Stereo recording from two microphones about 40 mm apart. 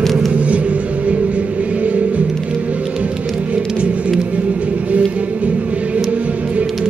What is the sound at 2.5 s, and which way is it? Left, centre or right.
Music, right.